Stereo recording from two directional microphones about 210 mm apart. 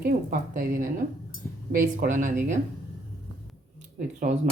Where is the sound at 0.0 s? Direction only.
40° right (ahead or behind).